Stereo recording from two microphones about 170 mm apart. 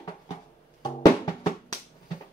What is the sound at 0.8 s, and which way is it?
Music, 25° left (ahead or behind).